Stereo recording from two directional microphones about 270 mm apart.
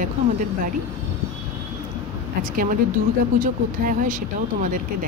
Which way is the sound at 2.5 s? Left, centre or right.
Right.